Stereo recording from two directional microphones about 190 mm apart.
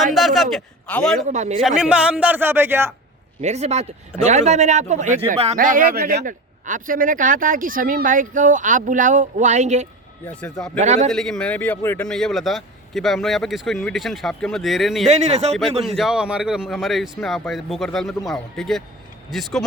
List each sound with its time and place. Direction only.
0.1 s a man's voice: centre (ahead or behind)
1.3 s speech: 40° right (ahead or behind)
1.8 s speech: 5° right (ahead or behind)
3.4 s speech: 35° right (ahead or behind)
11.1 s a man's voice: centre (ahead or behind)
15.0 s speech: 35° right (ahead or behind)
16.0 s a man's voice: 5° right (ahead or behind)